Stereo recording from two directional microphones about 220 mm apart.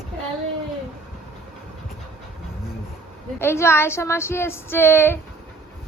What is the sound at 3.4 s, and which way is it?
Speech, 10° left (ahead or behind).